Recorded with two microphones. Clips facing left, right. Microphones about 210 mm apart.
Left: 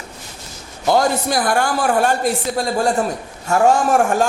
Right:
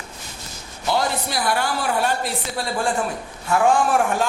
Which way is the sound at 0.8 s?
45° left (ahead or behind).